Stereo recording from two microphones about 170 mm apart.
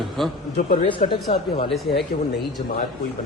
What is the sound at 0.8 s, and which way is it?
Speech, 30° left (ahead or behind).